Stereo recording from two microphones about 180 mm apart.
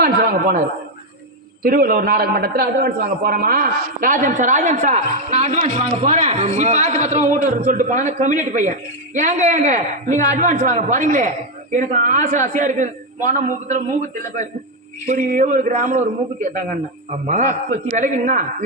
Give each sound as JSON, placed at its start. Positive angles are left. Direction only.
{"t": 0.0, "sound": "a man's voice", "side_deg": -55}
{"t": 1.6, "sound": "a man's voice", "side_deg": -55}
{"t": 15.0, "sound": "a man's voice", "side_deg": -45}